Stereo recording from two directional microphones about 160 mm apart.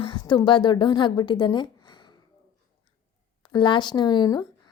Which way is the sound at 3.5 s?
30° left (ahead or behind).